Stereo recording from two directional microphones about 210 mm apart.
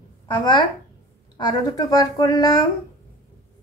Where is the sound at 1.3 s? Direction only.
20° left (ahead or behind).